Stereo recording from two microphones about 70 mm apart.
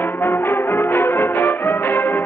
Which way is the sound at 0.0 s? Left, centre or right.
Left.